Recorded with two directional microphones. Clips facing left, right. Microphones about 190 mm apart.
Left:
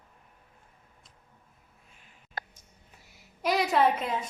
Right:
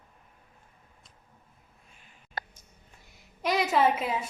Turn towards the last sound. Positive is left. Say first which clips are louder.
# even
turn(degrees=-5)  # may be behind; listen again after turning